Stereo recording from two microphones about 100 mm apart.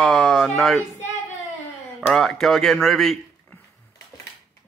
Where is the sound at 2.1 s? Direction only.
5° left (ahead or behind).